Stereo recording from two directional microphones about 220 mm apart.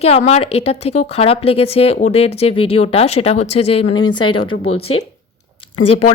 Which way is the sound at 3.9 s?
80° left.